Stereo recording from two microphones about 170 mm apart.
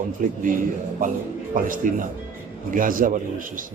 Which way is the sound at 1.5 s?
55° right (ahead or behind).